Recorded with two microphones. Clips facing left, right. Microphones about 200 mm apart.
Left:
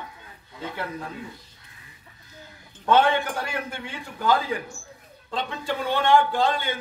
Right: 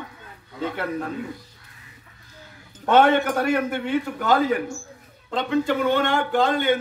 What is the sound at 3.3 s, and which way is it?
Speech, 60° right (ahead or behind).